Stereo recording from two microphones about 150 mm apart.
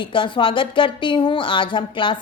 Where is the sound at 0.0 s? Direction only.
35° left (ahead or behind).